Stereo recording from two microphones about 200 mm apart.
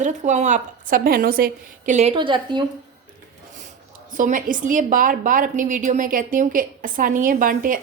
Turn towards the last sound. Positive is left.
turn(degrees=-45)  # may be behind; listen again after turning